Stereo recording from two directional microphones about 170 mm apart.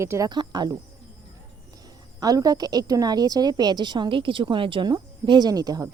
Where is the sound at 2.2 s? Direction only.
20° right (ahead or behind).